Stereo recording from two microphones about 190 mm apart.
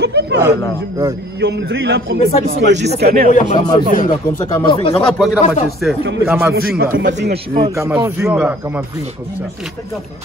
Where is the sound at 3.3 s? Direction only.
40° left (ahead or behind).